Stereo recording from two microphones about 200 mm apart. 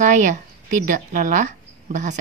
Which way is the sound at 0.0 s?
40° right (ahead or behind).